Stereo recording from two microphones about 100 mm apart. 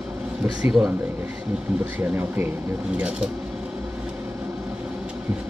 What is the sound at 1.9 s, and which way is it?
Speech, 20° right (ahead or behind).